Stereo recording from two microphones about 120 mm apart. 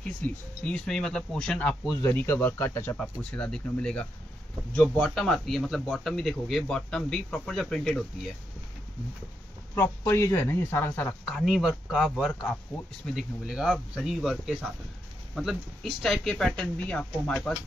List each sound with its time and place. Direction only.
0.2 s speech: 10° left (ahead or behind)
3.0 s a man's voice: 10° left (ahead or behind)
9.8 s speech: 20° left (ahead or behind)
11.2 s a man's voice: centre (ahead or behind)